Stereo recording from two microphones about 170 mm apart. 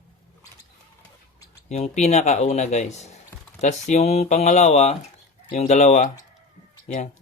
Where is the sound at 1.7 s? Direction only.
40° left (ahead or behind).